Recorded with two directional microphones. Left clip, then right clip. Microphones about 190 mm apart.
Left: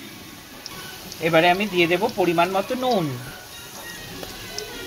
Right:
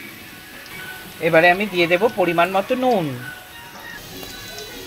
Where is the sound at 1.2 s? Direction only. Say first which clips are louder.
Right 3 dB; 20° right (ahead or behind).